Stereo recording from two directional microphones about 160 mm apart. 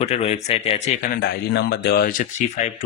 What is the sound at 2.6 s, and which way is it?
Speech, 45° left (ahead or behind).